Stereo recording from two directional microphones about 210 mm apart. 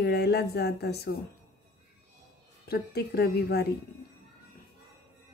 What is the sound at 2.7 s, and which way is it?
Speech, 50° left (ahead or behind).